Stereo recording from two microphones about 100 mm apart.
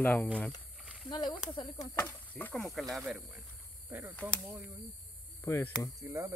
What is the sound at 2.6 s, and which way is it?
Speech, centre (ahead or behind).